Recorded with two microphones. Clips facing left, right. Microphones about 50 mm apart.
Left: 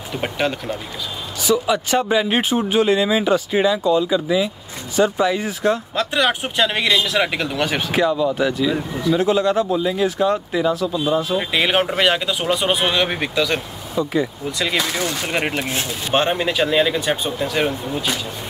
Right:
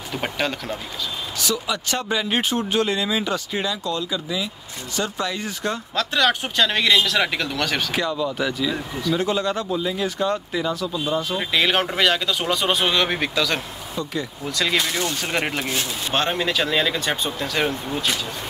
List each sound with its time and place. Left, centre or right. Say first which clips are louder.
0.1 s speech: left 3 dB; centre
7.9 s speech: left 6 dB; centre
15.7 s speech: left 4 dB; left